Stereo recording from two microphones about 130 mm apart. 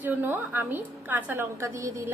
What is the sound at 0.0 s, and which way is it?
A woman's voice, 15° right (ahead or behind).